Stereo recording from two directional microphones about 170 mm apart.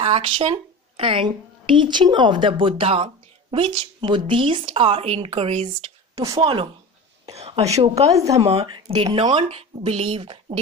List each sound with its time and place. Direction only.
0.0 s speech: 35° right (ahead or behind)
6.1 s speech: 20° right (ahead or behind)
6.4 s speech: 35° right (ahead or behind)